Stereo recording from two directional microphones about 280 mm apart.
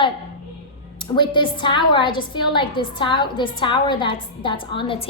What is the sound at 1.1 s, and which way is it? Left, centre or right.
A woman's voice, centre.